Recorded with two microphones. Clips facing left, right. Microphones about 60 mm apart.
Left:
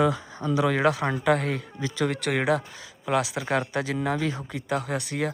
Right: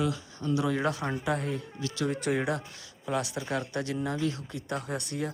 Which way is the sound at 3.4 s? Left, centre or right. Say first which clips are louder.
Left 4 dB; left.